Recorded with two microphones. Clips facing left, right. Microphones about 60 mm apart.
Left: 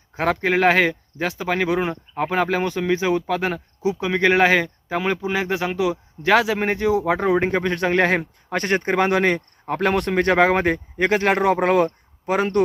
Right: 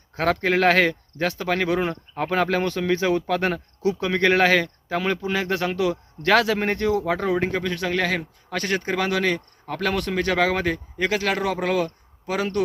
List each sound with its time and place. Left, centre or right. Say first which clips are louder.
0.1 s speech: left 1 dB; centre; by 12.6 s left